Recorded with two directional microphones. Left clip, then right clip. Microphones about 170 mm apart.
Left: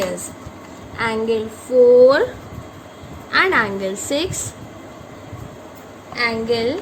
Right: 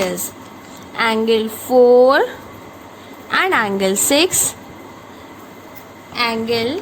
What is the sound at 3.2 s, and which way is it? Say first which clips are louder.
A woman's voice: even; 55° right (ahead or behind).